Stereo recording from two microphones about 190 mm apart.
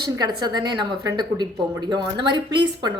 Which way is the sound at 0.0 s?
20° right (ahead or behind).